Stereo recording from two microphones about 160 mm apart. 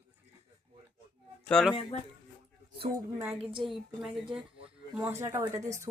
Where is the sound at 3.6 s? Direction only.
Centre (ahead or behind).